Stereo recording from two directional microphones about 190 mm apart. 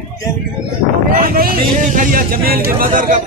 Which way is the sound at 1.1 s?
50° right (ahead or behind).